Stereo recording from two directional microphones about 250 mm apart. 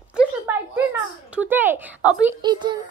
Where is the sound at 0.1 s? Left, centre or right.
Centre.